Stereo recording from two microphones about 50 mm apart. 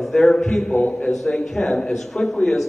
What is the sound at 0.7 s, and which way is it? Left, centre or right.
Speech, left.